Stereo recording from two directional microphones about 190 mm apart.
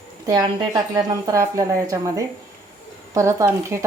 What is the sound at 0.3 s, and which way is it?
A woman's voice, 20° right (ahead or behind).